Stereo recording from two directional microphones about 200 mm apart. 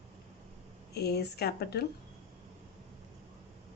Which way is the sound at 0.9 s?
55° left (ahead or behind).